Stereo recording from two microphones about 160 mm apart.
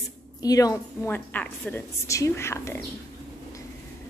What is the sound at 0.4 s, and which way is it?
A woman's voice, 20° left (ahead or behind).